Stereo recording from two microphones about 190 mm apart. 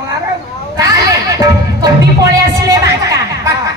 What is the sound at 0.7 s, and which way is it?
Speech, 20° right (ahead or behind).